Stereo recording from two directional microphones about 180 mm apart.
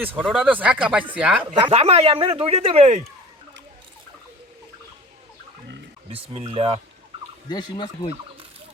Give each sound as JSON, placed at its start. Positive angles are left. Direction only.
{"t": 0.3, "sound": "speech", "side_deg": -5}
{"t": 1.5, "sound": "speech", "side_deg": -30}
{"t": 6.1, "sound": "speech", "side_deg": -30}
{"t": 7.4, "sound": "speech", "side_deg": 25}